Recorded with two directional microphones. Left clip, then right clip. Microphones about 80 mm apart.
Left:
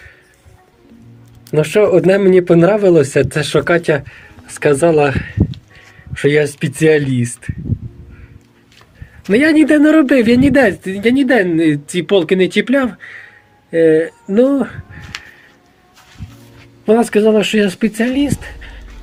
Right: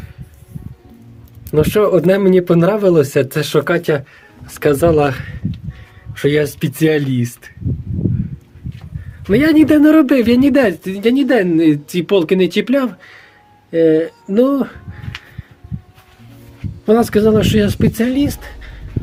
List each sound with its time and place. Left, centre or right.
1.5 s a man's voice: right
9.3 s a man's voice: right
16.8 s a man's voice: right